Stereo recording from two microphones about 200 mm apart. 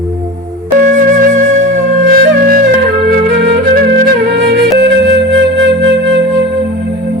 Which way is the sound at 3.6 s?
50° right (ahead or behind).